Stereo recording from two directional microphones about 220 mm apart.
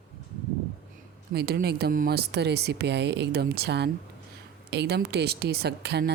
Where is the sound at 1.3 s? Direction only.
45° right (ahead or behind).